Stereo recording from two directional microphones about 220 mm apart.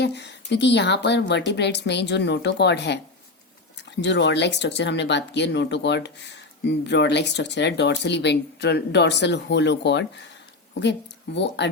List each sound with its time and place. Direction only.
0.0 s speech: 50° left (ahead or behind)
4.0 s speech: 55° left (ahead or behind)
11.3 s speech: 50° left (ahead or behind)